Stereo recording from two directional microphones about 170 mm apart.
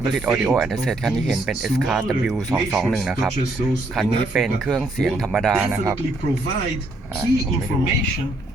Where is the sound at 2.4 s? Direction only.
20° right (ahead or behind).